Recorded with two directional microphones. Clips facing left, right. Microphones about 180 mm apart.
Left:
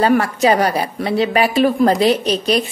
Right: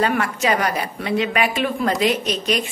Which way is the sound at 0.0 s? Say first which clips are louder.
Left 6 dB; 35° left (ahead or behind).